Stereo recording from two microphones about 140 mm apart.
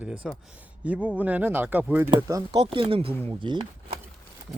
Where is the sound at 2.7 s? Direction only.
40° right (ahead or behind).